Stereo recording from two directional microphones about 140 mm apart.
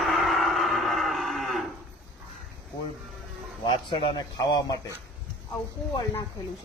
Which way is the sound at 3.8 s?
35° left (ahead or behind).